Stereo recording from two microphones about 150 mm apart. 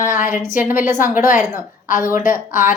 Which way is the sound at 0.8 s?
15° right (ahead or behind).